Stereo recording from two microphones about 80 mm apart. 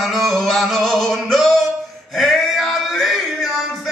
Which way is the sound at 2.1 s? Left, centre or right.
Centre.